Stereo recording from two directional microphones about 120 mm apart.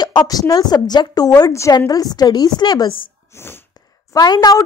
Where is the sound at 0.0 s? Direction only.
35° left (ahead or behind).